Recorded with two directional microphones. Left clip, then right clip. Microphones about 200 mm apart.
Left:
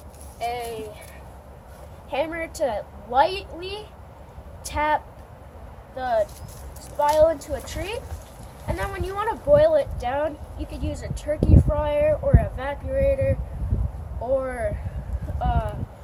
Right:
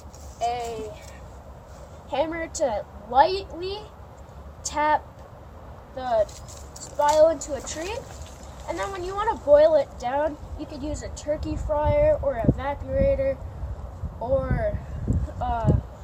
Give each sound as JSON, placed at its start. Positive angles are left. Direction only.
{"t": 0.3, "sound": "speech", "side_deg": 0}
{"t": 2.0, "sound": "speech", "side_deg": 5}
{"t": 6.0, "sound": "speech", "side_deg": 0}
{"t": 14.4, "sound": "speech", "side_deg": 5}